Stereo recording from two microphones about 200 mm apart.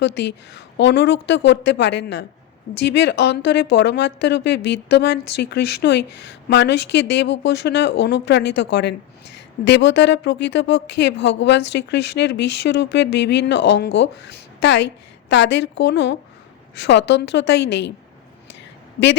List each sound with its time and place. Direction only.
0.0 s a woman's voice: 60° left (ahead or behind)